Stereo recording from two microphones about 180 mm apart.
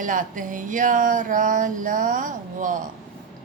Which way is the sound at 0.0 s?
45° right (ahead or behind).